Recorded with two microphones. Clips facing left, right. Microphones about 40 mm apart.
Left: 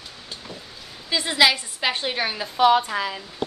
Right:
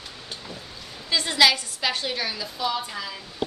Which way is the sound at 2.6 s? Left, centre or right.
Left.